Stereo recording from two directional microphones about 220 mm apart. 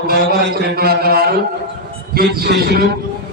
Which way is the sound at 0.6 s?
45° right (ahead or behind).